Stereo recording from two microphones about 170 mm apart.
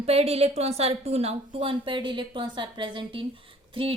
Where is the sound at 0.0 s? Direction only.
35° right (ahead or behind).